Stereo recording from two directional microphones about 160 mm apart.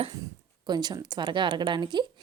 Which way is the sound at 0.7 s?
25° right (ahead or behind).